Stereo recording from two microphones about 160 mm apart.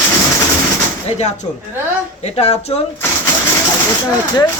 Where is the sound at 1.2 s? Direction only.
45° left (ahead or behind).